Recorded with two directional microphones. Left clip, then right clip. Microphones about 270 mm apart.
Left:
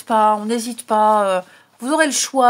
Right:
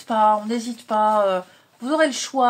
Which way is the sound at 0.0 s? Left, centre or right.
Left.